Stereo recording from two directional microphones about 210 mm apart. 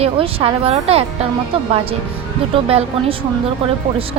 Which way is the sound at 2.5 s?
25° right (ahead or behind).